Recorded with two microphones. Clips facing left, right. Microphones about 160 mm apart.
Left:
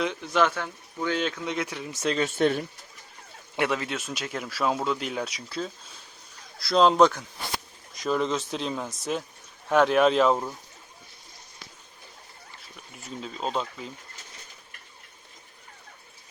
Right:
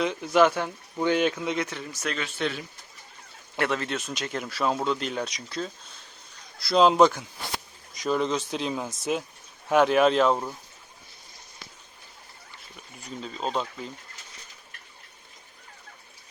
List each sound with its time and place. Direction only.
0.0 s speech: 5° right (ahead or behind)
1.6 s speech: 10° left (ahead or behind)
1.9 s speech: 25° left (ahead or behind)
2.1 s speech: 45° left (ahead or behind)
3.6 s speech: 10° left (ahead or behind)
12.7 s speech: centre (ahead or behind)